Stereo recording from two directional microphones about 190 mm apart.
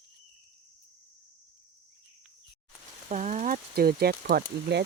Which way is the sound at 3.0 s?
40° right (ahead or behind).